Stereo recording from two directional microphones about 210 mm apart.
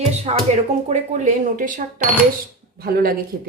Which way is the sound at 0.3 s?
30° right (ahead or behind).